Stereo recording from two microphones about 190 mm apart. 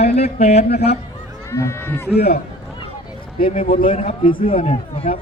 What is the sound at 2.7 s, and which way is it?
A man's voice, 25° left (ahead or behind).